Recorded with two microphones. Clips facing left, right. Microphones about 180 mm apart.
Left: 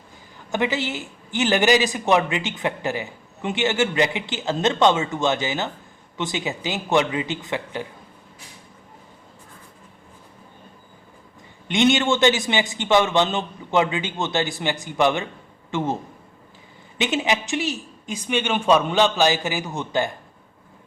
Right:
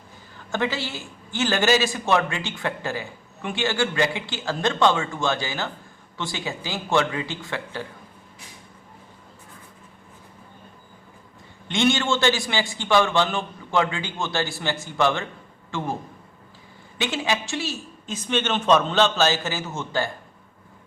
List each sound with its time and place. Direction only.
0.3 s a man's voice: 15° left (ahead or behind)
11.7 s a man's voice: 20° left (ahead or behind)
17.0 s a man's voice: 20° left (ahead or behind)